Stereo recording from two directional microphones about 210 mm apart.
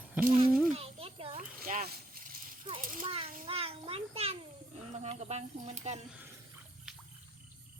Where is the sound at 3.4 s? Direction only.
25° right (ahead or behind).